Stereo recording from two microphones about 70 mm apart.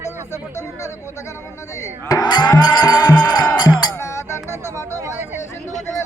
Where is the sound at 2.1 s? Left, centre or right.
Left.